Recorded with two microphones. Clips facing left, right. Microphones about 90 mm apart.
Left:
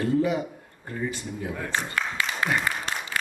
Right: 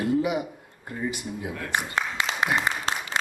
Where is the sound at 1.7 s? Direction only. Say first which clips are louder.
Right 2 dB; 20° right (ahead or behind).